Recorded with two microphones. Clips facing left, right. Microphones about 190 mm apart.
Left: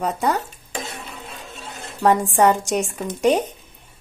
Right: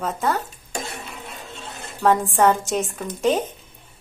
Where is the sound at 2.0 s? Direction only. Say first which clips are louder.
Left 1 dB; 15° left (ahead or behind).